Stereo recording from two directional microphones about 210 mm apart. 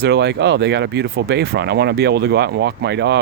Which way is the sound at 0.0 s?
55° right (ahead or behind).